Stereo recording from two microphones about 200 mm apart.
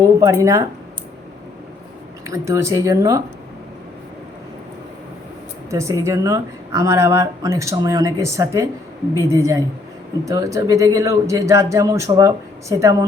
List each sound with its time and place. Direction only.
0.2 s speech: 15° right (ahead or behind)
2.2 s speech: 15° right (ahead or behind)
5.7 s speech: 15° right (ahead or behind)